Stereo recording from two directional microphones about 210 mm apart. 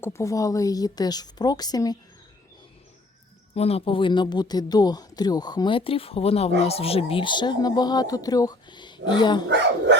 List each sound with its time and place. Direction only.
0.0 s a woman's voice: 15° left (ahead or behind)
3.5 s speech: 30° left (ahead or behind)